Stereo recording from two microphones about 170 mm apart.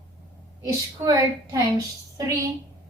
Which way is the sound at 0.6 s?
20° right (ahead or behind).